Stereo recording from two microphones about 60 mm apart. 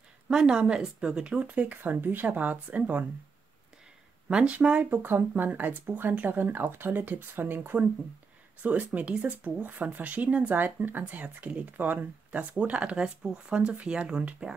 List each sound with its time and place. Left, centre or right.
0.3 s speech: centre; by 3.1 s right
4.3 s speech: centre